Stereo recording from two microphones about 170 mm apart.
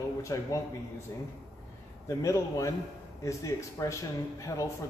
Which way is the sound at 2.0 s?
15° left (ahead or behind).